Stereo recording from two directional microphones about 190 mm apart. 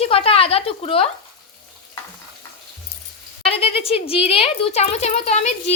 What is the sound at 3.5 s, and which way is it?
A woman's voice, 30° left (ahead or behind).